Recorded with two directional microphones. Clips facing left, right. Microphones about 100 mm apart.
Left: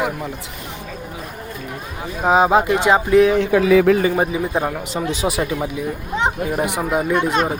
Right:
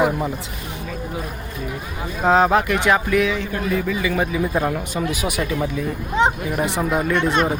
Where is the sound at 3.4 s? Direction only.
90° left; by 4.0 s 65° left (ahead or behind).